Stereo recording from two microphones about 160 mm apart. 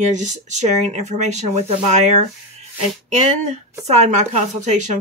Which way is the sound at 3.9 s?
45° right (ahead or behind).